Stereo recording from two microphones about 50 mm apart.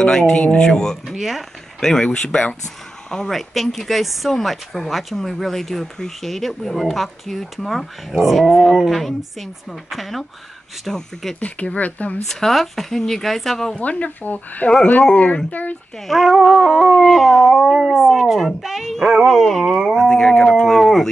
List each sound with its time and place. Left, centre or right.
0.0 s speech: centre
1.0 s speech: centre
1.8 s speech: centre
3.3 s speech: centre
11.3 s speech: left
12.3 s speech: centre
13.7 s speech: left
16.1 s speech: centre